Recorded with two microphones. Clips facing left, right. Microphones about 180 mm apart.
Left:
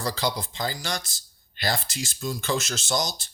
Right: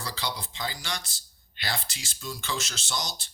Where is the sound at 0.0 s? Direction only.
45° left (ahead or behind).